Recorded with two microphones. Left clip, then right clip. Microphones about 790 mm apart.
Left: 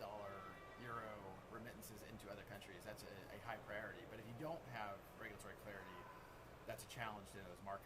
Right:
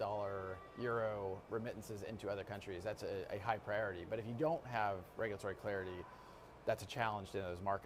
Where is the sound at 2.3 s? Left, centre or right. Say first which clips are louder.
Right 12 dB; right.